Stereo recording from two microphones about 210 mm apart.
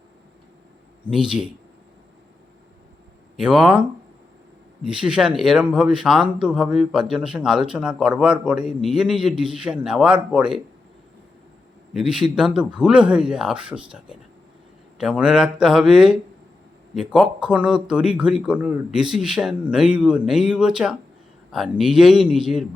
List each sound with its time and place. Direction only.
1.0 s speech: 5° right (ahead or behind)
3.3 s speech: 5° right (ahead or behind)
11.9 s speech: centre (ahead or behind)